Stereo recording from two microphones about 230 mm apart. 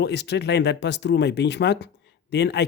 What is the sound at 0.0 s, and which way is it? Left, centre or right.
Speech, left.